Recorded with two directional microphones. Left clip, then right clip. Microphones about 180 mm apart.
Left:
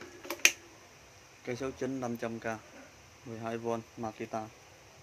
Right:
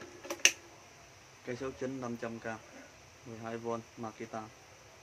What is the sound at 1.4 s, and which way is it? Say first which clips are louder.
Speech: left 2 dB; 35° left (ahead or behind).